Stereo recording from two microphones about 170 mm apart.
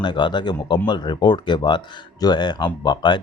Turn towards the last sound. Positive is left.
turn(degrees=25)  # may be behind; listen again after turning